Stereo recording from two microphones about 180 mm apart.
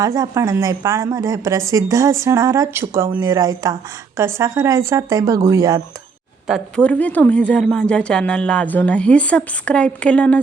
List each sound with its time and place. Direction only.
0.0 s a woman's voice: 20° right (ahead or behind)
6.5 s a woman's voice: 5° left (ahead or behind)